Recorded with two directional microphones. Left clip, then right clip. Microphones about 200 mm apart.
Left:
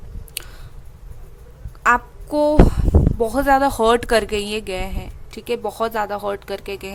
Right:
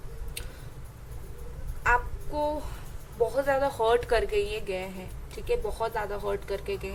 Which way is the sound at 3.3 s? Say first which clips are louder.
Left 12 dB; 55° left (ahead or behind).